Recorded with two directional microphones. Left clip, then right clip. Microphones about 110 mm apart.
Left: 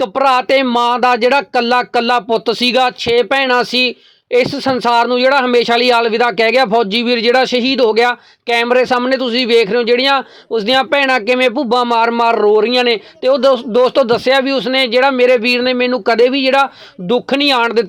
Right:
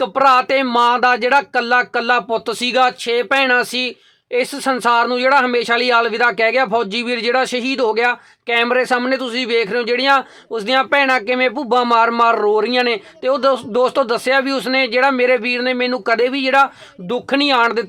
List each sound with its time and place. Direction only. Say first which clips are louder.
0.0 s a man's voice: even; 40° left (ahead or behind); by 10.8 s 25° left (ahead or behind)
10.8 s a man's voice: even; 35° left (ahead or behind)
15.4 s a man's voice: left 4 dB; 35° left (ahead or behind)